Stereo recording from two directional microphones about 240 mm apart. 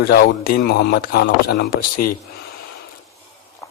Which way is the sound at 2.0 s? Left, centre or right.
Left.